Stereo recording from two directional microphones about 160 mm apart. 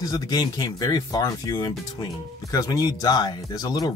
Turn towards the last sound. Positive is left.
turn(degrees=25)  # may be behind; listen again after turning